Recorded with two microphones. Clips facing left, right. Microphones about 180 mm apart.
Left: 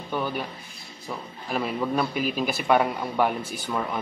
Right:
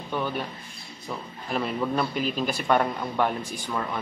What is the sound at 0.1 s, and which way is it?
A man's voice, 5° left (ahead or behind).